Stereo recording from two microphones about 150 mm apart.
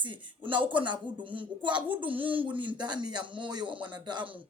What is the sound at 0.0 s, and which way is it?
A woman's voice, 30° right (ahead or behind).